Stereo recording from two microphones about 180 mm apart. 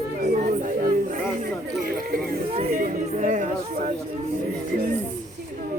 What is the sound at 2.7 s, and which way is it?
Chatter, 45° right (ahead or behind).